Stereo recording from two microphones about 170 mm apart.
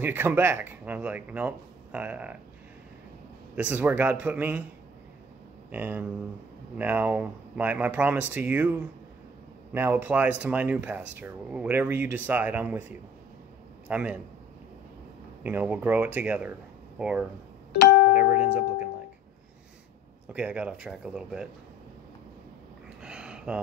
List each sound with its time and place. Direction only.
0.0 s speech: 10° right (ahead or behind)
3.5 s speech: 10° right (ahead or behind)
5.7 s a man's voice: 10° right (ahead or behind)
15.4 s speech: 10° right (ahead or behind)
17.7 s music: 65° left (ahead or behind)
18.1 s music: 10° right (ahead or behind)
20.3 s speech: 10° right (ahead or behind)
23.0 s a sound: 5° right (ahead or behind)